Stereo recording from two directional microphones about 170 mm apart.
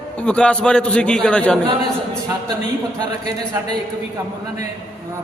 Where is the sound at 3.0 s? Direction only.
25° right (ahead or behind).